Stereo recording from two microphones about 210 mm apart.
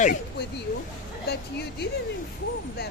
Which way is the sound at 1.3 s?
50° left (ahead or behind).